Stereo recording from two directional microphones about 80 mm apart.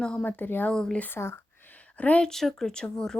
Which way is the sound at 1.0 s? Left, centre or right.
Left.